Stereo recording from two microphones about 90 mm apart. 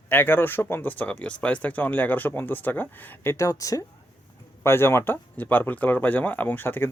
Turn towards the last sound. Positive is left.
turn(degrees=20)  # may be behind; listen again after turning